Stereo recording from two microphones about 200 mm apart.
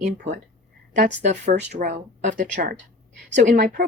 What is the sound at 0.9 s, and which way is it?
Speech, 35° right (ahead or behind).